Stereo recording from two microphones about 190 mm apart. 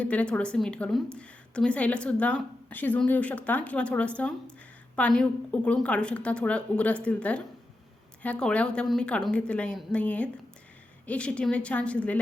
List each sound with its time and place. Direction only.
0.0 s a woman's voice: 5° left (ahead or behind)